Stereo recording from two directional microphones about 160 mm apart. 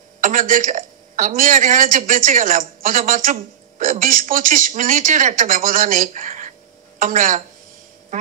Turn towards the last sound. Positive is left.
turn(degrees=-50)  # may be behind; listen again after turning